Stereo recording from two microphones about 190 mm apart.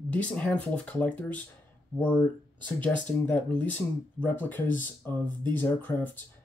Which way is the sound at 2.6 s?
10° left (ahead or behind).